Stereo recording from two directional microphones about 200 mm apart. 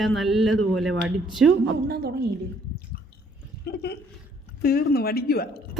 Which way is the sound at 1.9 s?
50° right (ahead or behind).